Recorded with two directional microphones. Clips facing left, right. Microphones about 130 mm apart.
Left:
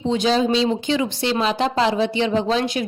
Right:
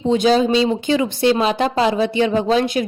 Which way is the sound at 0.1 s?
45° right (ahead or behind).